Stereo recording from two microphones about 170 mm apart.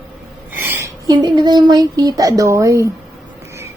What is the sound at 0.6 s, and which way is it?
A woman's voice, 15° right (ahead or behind).